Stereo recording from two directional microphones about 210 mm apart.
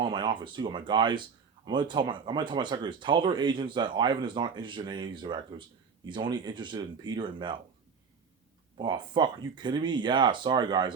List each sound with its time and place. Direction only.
0.0 s speech: 20° right (ahead or behind)
8.8 s speech: 20° right (ahead or behind)